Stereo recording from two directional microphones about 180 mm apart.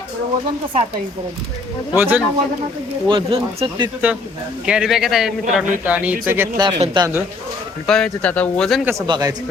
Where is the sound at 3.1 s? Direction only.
25° right (ahead or behind).